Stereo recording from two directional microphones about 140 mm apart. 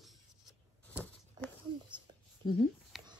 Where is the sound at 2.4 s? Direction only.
30° left (ahead or behind).